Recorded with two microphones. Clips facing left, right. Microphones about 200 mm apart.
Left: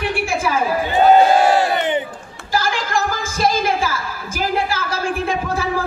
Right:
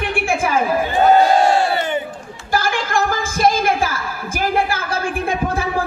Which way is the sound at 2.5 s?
55° right (ahead or behind).